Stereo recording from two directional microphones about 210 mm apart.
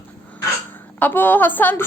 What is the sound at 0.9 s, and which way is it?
Speech, 10° left (ahead or behind).